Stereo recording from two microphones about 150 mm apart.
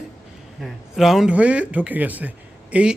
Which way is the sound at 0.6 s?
Centre (ahead or behind).